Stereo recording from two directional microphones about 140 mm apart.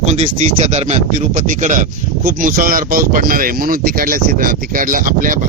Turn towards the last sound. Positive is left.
turn(degrees=-75)  # may be behind; listen again after turning